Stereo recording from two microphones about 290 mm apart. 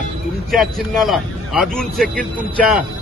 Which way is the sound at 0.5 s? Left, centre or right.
Centre.